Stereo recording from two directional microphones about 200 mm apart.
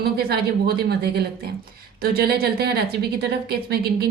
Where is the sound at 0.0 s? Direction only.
50° right (ahead or behind).